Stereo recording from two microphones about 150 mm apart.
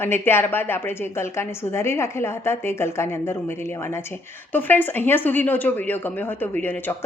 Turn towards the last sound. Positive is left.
turn(degrees=10)  # may be behind; listen again after turning